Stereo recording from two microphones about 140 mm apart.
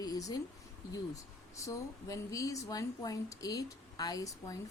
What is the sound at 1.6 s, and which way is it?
Speech, 20° left (ahead or behind).